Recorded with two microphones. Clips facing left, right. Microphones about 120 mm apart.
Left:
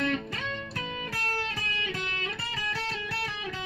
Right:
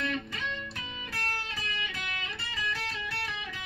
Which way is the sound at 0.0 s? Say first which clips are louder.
Left 4 dB; 40° left (ahead or behind).